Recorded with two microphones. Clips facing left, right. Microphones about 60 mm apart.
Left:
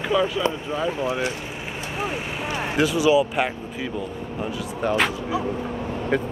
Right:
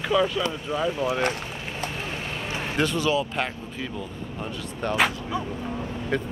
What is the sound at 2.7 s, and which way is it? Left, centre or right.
Speech, centre.